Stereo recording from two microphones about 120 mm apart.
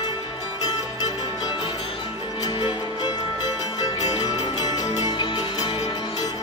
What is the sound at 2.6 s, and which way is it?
Music, 35° left (ahead or behind).